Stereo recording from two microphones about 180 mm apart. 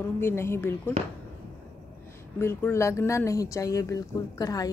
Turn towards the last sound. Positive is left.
turn(degrees=20)  # may be behind; listen again after turning